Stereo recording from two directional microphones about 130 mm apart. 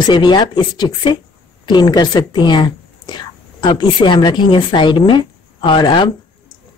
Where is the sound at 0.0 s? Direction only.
35° left (ahead or behind).